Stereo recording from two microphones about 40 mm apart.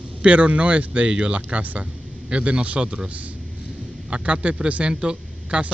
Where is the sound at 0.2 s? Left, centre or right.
Right.